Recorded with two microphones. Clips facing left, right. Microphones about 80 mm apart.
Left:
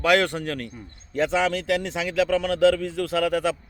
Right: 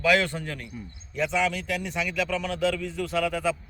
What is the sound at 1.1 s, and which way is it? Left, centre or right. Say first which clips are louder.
A man's voice: left 4 dB; left.